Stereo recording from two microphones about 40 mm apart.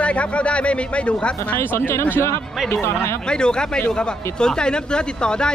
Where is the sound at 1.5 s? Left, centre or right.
Left.